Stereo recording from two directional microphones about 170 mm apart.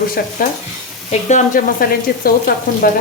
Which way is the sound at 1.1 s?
45° left (ahead or behind).